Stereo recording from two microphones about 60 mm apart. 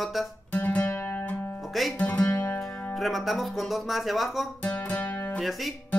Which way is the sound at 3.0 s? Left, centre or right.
Centre.